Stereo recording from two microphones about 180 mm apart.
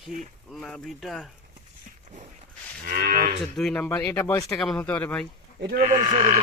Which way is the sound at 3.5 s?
5° left (ahead or behind).